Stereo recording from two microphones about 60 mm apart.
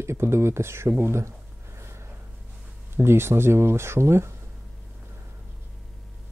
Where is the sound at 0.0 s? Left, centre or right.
Right.